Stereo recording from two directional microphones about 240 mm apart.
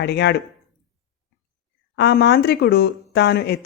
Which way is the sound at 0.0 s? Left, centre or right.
Left.